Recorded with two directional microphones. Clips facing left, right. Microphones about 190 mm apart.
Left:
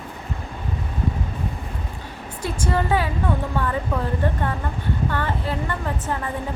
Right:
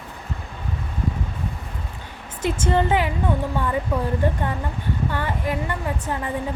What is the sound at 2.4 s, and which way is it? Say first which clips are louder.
Speech: right 3 dB; 25° right (ahead or behind).